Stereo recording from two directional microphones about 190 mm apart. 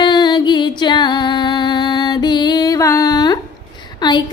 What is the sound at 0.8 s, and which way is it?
Female singing, 25° left (ahead or behind).